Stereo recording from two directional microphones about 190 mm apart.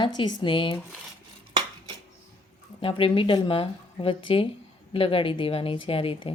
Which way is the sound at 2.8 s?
30° left (ahead or behind).